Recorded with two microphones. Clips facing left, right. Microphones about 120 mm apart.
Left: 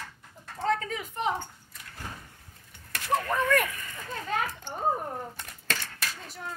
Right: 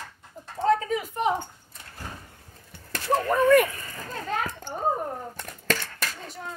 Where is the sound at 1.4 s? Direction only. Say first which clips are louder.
Right 3 dB; 30° right (ahead or behind).